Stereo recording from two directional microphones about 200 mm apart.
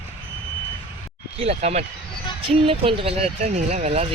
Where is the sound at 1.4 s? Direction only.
30° right (ahead or behind).